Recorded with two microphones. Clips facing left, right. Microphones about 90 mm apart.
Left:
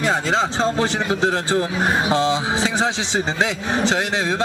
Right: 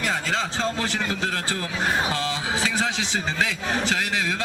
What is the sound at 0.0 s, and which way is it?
Speech, 30° left (ahead or behind).